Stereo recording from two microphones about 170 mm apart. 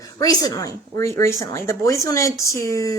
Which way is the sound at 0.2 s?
20° left (ahead or behind).